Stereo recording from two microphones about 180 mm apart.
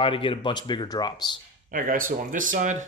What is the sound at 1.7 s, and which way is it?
Speech, 50° right (ahead or behind).